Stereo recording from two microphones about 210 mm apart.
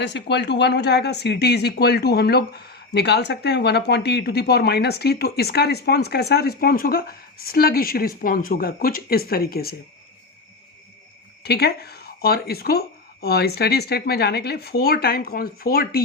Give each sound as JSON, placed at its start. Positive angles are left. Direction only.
{"t": 0.0, "sound": "speech", "side_deg": 55}
{"t": 11.4, "sound": "speech", "side_deg": 50}